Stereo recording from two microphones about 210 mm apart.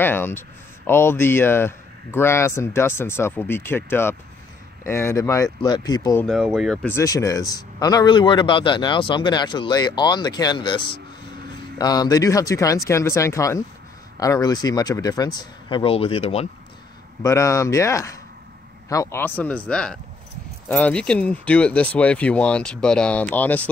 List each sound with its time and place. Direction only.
0.0 s speech: 10° left (ahead or behind)
6.2 s speech: centre (ahead or behind); by 16.4 s 30° left (ahead or behind)
17.2 s speech: 15° left (ahead or behind)